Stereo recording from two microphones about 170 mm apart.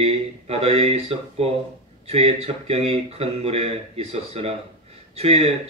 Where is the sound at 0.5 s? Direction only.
35° right (ahead or behind).